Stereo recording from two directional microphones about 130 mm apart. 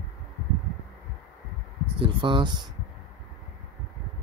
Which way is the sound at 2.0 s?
40° right (ahead or behind).